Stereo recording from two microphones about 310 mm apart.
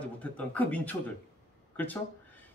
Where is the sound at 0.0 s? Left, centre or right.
Centre.